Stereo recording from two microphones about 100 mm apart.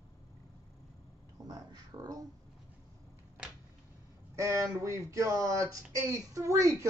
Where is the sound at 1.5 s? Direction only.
40° right (ahead or behind).